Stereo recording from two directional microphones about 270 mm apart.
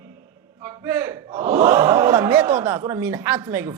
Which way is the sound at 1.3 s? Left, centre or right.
Right.